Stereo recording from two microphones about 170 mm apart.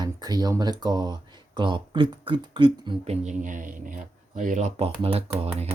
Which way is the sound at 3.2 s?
50° right (ahead or behind).